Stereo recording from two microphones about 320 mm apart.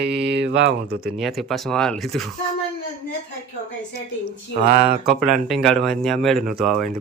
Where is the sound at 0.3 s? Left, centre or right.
Right.